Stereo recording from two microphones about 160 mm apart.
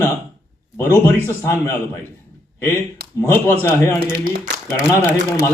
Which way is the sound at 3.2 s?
15° left (ahead or behind).